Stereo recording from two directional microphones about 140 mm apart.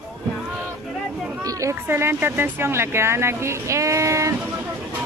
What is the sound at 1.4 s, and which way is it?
Speech, 25° right (ahead or behind).